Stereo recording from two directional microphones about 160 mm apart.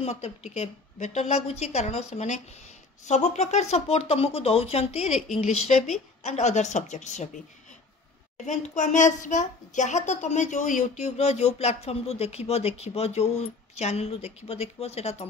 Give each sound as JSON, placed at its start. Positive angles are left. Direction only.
{"t": 0.0, "sound": "a woman's voice", "side_deg": 40}
{"t": 8.7, "sound": "a woman's voice", "side_deg": 50}